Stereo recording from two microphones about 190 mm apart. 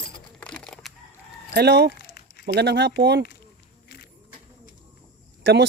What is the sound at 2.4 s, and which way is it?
Speech, 60° right (ahead or behind).